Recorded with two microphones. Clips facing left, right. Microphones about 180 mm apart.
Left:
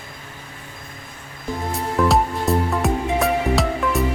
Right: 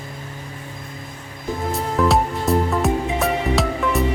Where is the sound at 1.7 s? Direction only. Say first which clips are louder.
Even; centre (ahead or behind).